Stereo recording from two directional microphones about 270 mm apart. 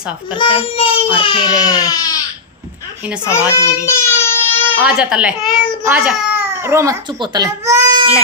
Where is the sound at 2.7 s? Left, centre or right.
Centre.